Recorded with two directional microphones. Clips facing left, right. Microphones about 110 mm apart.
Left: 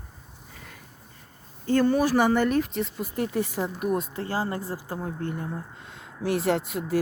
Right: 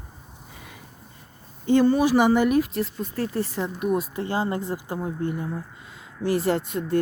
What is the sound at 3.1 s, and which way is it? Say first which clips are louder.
Speech: even; 15° left (ahead or behind).